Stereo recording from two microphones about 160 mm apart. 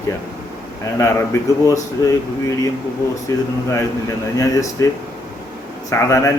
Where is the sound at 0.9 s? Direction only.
20° left (ahead or behind).